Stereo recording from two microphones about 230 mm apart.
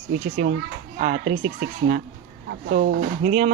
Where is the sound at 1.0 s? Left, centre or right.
Right.